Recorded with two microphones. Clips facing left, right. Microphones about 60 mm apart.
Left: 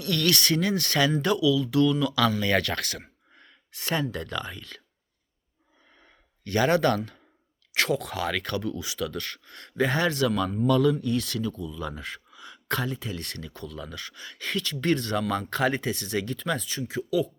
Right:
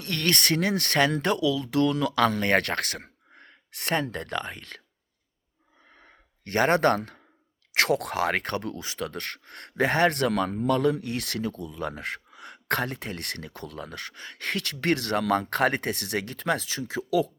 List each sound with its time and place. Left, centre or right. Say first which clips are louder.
0.0 s speech: left 1 dB; right
6.0 s sigh: left 3 dB; right
7.7 s speech: right 2 dB; right